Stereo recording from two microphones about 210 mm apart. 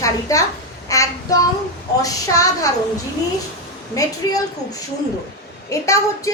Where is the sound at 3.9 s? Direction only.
15° left (ahead or behind).